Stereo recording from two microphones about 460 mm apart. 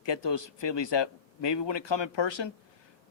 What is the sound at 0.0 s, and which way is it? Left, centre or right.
A man's voice, left.